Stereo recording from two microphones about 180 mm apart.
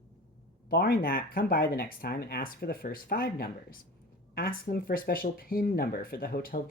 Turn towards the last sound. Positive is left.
turn(degrees=55)  # may be behind; listen again after turning